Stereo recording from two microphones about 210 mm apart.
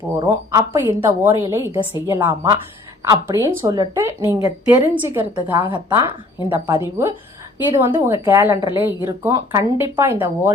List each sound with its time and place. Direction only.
0.2 s a woman's voice: 15° right (ahead or behind)
5.5 s a woman's voice: 20° right (ahead or behind)